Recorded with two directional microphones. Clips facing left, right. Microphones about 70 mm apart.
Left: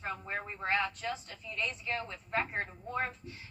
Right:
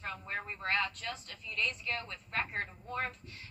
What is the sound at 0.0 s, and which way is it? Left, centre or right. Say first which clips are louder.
A woman's voice: left 2 dB; centre.